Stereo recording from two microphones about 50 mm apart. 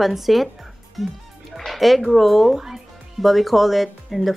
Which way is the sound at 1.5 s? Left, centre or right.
Centre.